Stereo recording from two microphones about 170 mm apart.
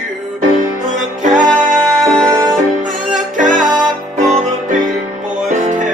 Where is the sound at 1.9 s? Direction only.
5° left (ahead or behind).